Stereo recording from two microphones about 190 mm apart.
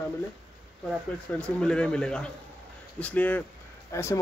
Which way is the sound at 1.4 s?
5° left (ahead or behind).